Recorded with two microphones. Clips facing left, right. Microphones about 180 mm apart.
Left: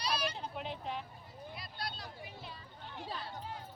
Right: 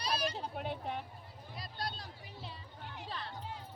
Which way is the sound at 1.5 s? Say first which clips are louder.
Right 4 dB; 45° right (ahead or behind).